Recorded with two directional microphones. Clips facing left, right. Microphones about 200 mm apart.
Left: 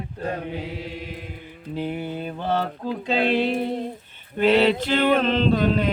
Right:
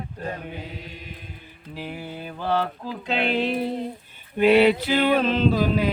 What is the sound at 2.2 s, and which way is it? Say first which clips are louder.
Mantra: right 2 dB; 25° left (ahead or behind).